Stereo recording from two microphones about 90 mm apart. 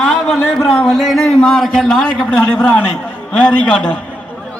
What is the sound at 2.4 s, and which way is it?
A man's voice, 20° left (ahead or behind).